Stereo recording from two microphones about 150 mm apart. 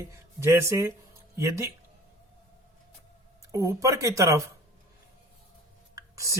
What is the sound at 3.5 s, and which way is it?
Speech, 20° right (ahead or behind).